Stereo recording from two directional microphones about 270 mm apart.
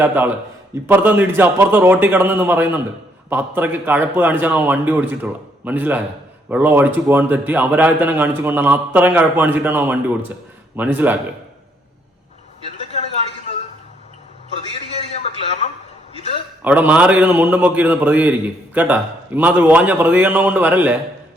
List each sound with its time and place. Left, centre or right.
0.0 s a man's voice: centre
15.6 s a sound: left
16.6 s a man's voice: centre